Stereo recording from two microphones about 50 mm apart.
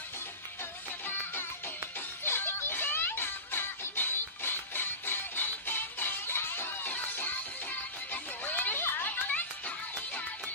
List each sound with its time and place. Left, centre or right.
2.2 s music: left
8.1 s music: left
9.3 s music: left